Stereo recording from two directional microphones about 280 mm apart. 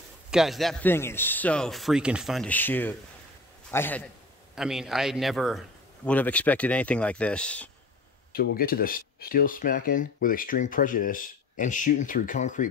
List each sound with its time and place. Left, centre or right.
0.3 s a man's voice: centre
8.3 s speech: left